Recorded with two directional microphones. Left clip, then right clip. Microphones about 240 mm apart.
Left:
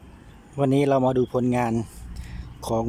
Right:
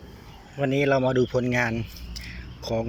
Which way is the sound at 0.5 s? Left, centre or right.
Centre.